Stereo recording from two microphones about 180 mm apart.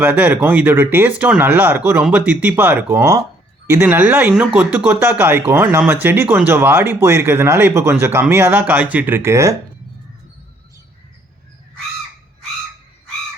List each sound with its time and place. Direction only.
0.0 s speech: 10° right (ahead or behind)